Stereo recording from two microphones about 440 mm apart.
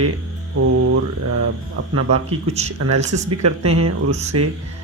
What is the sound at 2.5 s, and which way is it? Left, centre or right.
Speech, centre.